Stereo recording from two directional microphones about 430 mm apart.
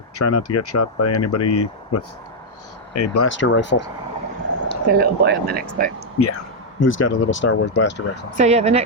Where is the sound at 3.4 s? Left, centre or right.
Left.